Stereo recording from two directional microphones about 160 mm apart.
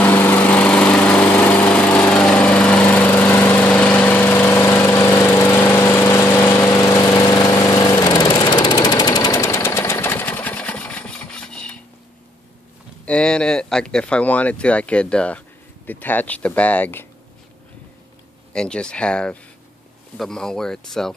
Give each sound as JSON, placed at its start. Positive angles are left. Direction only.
{"t": 0.0, "sound": "lawn mower", "side_deg": 10}
{"t": 13.0, "sound": "speech", "side_deg": 5}
{"t": 18.5, "sound": "speech", "side_deg": 5}